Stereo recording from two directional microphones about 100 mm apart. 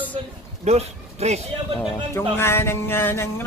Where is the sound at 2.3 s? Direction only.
25° left (ahead or behind).